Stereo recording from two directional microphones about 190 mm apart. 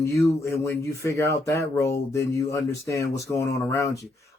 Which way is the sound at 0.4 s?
15° left (ahead or behind).